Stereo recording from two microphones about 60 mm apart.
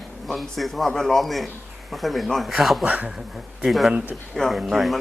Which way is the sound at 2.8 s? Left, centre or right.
Right.